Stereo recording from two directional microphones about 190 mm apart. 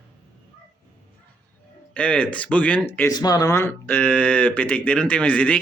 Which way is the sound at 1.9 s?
5° left (ahead or behind).